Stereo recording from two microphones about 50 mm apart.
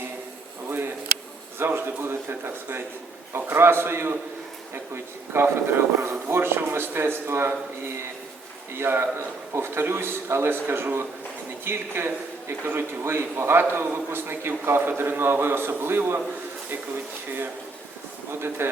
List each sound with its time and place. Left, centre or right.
1.5 s a man's voice: right
5.3 s a man's voice: right
18.3 s a man's voice: right